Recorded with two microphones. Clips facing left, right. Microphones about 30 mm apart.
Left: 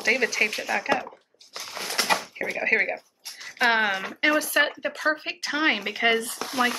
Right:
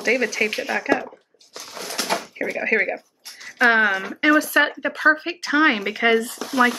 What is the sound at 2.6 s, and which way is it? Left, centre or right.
Speech, centre.